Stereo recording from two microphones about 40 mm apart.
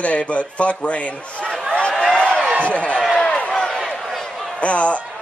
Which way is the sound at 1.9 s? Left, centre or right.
Centre.